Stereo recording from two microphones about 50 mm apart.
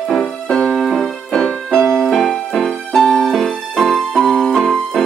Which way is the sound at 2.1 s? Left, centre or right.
Centre.